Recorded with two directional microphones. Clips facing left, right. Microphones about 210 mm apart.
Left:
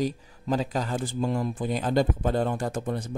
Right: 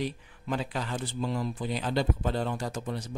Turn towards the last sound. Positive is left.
turn(degrees=55)  # may be behind; listen again after turning